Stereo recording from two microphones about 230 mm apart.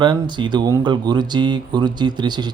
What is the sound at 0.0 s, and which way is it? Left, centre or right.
Speech, centre.